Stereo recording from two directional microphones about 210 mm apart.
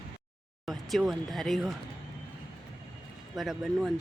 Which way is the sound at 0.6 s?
Centre (ahead or behind).